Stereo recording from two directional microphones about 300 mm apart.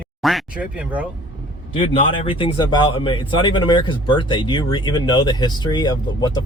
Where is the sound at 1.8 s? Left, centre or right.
Centre.